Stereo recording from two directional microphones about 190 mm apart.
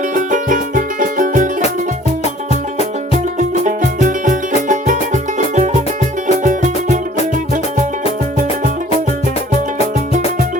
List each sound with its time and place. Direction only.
0.1 s music: 45° right (ahead or behind)
3.7 s music: 40° right (ahead or behind)